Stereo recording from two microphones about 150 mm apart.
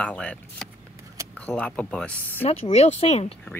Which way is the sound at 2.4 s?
45° left (ahead or behind).